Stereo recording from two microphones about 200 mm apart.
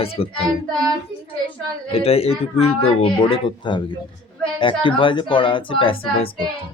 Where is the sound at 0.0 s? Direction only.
30° left (ahead or behind).